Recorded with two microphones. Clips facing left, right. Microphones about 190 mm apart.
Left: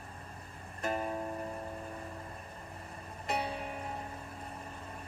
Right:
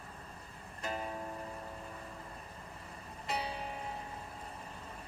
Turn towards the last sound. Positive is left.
turn(degrees=55)  # may be behind; listen again after turning